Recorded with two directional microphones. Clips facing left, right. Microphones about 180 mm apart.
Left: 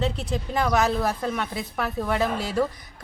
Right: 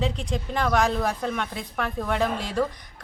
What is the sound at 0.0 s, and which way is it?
Speech, 5° left (ahead or behind).